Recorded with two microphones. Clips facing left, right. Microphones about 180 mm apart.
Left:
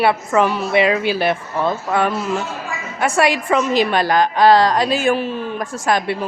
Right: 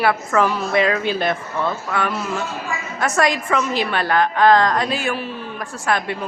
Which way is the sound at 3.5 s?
25° left (ahead or behind).